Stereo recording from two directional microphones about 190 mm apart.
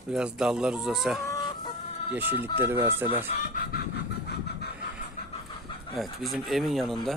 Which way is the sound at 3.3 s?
35° left (ahead or behind).